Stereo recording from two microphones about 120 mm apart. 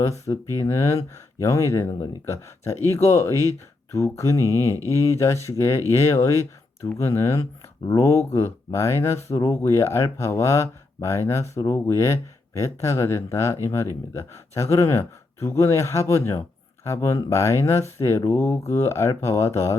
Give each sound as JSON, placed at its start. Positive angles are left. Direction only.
{"t": 0.1, "sound": "speech", "side_deg": 25}